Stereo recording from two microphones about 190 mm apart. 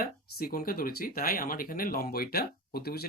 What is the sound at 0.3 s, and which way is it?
Speech, 50° left (ahead or behind).